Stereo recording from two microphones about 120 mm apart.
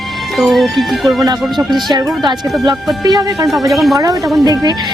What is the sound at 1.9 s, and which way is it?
A woman's voice, 35° right (ahead or behind).